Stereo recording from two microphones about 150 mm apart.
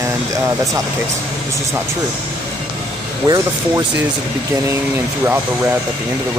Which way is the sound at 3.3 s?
20° right (ahead or behind).